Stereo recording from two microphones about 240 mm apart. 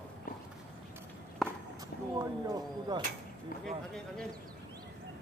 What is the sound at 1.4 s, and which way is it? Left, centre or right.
Walk, centre.